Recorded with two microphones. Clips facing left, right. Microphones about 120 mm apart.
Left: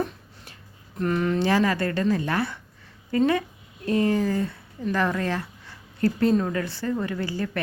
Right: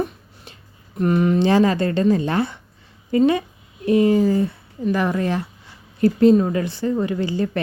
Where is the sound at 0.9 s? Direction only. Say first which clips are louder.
Right 6 dB; 15° right (ahead or behind).